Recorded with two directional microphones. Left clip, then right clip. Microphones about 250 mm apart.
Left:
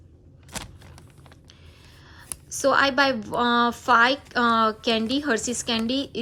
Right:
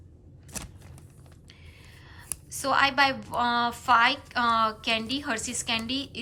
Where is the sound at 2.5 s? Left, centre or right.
Centre.